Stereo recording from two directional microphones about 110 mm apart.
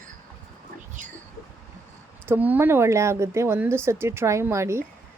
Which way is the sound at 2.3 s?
15° right (ahead or behind).